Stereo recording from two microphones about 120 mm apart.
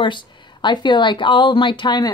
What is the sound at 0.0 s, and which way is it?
Speech, 40° left (ahead or behind).